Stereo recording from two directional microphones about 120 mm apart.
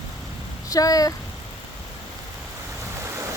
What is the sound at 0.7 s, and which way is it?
Speech, 30° left (ahead or behind).